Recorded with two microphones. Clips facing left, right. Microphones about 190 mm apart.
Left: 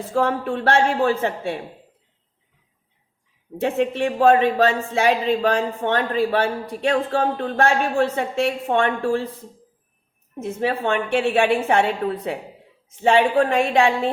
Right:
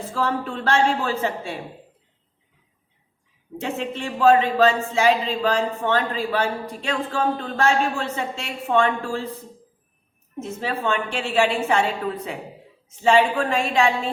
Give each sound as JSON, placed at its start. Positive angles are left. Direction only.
{"t": 0.1, "sound": "a man's voice", "side_deg": 55}
{"t": 3.6, "sound": "a man's voice", "side_deg": 60}
{"t": 10.4, "sound": "a man's voice", "side_deg": 60}